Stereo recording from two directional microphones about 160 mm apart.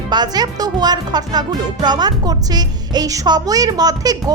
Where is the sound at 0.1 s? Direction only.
25° right (ahead or behind).